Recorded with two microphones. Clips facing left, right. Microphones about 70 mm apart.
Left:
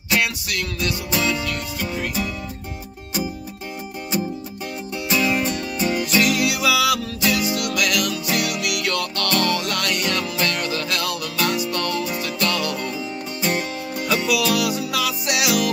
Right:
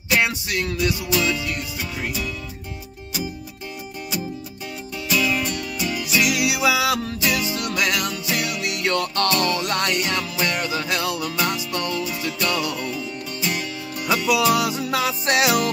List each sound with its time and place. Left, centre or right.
0.1 s music: right
5.1 s music: left
6.0 s music: centre
13.4 s music: left
14.0 s music: right